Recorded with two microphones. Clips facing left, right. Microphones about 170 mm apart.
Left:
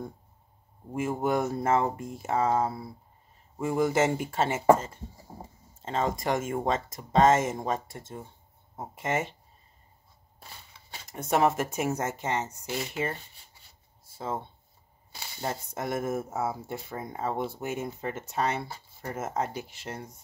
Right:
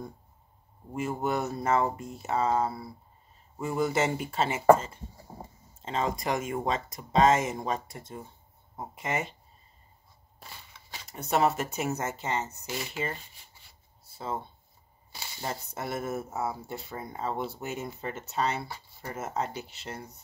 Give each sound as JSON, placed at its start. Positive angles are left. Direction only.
{"t": 0.9, "sound": "speech", "side_deg": 50}
{"t": 8.7, "sound": "speech", "side_deg": 50}
{"t": 11.1, "sound": "speech", "side_deg": 50}
{"t": 14.1, "sound": "speech", "side_deg": 50}
{"t": 15.4, "sound": "speech", "side_deg": 50}